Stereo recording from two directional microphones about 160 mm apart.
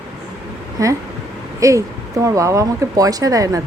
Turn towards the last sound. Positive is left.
turn(degrees=-20)  # may be behind; listen again after turning